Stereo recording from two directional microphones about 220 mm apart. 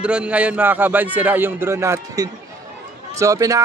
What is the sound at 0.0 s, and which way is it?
A man's voice, 5° right (ahead or behind).